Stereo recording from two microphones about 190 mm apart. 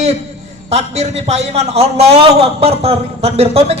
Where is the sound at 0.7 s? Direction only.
35° right (ahead or behind).